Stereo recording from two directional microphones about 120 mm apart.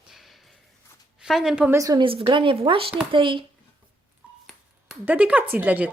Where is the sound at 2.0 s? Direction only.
45° right (ahead or behind).